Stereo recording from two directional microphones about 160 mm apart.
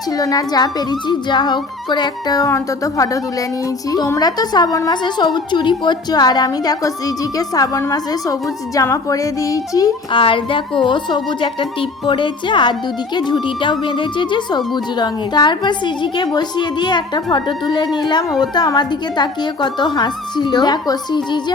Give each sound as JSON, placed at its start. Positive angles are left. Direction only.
{"t": 0.2, "sound": "a woman's voice", "side_deg": 25}